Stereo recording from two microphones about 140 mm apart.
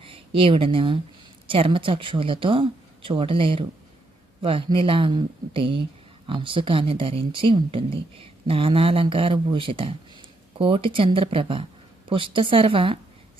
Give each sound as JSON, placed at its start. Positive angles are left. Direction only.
{"t": 0.0, "sound": "a woman's voice", "side_deg": -40}